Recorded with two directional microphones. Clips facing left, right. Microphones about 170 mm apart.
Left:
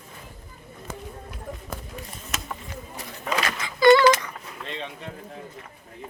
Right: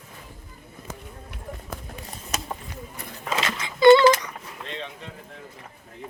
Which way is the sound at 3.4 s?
25° right (ahead or behind).